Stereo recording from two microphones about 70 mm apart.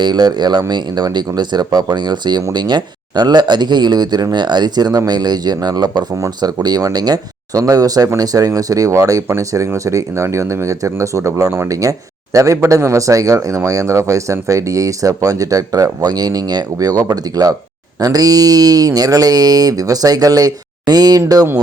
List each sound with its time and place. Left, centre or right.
0.0 s speech: right
6.2 s speech: right